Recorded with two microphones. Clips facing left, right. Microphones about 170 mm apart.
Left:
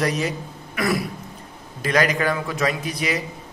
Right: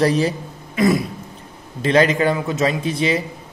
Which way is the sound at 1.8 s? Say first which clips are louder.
Right 5 dB; 25° right (ahead or behind).